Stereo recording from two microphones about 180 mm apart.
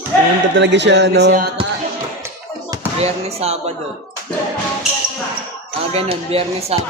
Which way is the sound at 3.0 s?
35° right (ahead or behind).